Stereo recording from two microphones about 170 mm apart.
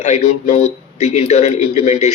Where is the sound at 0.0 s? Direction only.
40° left (ahead or behind).